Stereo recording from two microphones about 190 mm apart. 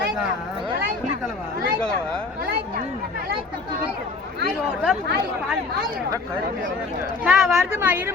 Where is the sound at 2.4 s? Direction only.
50° right (ahead or behind).